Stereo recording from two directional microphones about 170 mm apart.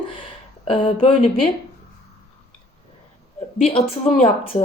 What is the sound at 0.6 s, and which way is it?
Speech, 30° left (ahead or behind).